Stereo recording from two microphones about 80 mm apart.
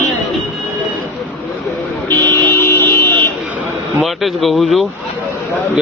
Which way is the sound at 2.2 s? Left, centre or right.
Left.